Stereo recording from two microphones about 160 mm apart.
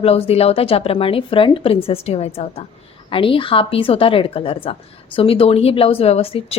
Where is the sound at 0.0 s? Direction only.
40° left (ahead or behind).